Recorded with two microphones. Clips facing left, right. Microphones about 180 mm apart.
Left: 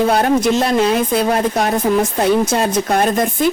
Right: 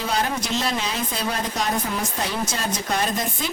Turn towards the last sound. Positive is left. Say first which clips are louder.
# left 10 dB
turn(degrees=55)  # may be behind; listen again after turning